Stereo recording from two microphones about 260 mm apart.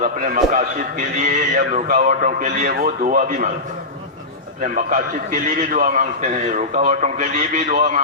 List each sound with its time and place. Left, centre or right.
0.0 s a man's voice: right
4.6 s a man's voice: right